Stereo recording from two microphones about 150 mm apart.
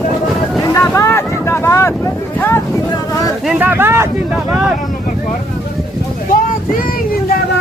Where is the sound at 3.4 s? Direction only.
10° right (ahead or behind).